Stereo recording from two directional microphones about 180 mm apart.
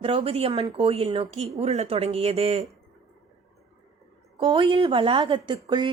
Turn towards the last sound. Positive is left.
turn(degrees=-25)  # may be behind; listen again after turning